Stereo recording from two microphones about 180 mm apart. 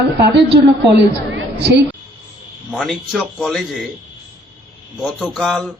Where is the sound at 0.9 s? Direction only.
70° right (ahead or behind).